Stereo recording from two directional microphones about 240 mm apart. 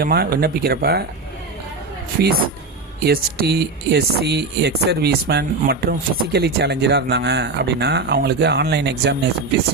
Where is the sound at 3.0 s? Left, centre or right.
Right.